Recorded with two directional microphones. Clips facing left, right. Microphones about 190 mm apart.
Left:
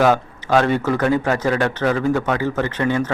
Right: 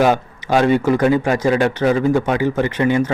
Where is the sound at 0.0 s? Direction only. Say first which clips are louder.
Right 1 dB; 10° right (ahead or behind).